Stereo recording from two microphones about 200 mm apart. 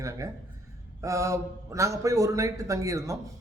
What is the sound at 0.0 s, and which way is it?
A man's voice, 15° right (ahead or behind).